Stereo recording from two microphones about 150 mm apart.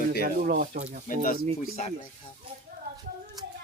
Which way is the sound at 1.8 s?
55° left (ahead or behind).